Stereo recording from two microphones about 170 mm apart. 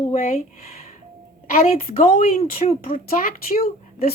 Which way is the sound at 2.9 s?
60° left (ahead or behind).